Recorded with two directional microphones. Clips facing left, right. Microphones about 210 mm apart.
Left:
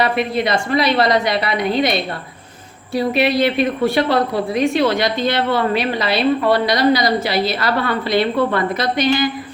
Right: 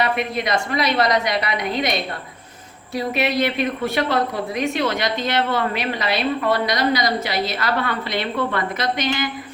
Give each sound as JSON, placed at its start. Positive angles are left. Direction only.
{"t": 0.0, "sound": "a woman's voice", "side_deg": 30}